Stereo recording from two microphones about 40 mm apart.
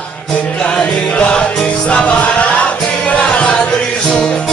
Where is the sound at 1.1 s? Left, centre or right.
Left.